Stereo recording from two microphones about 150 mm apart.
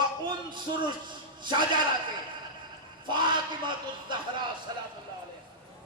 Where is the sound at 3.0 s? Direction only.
30° right (ahead or behind).